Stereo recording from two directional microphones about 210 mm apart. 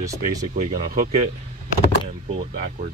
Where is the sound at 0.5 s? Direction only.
40° right (ahead or behind).